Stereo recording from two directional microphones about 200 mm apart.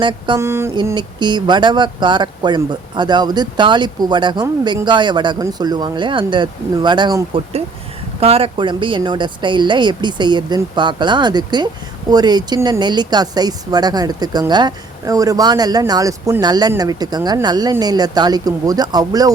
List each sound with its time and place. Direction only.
0.0 s speech: 25° right (ahead or behind)